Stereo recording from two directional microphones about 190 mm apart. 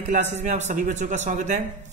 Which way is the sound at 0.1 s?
40° right (ahead or behind).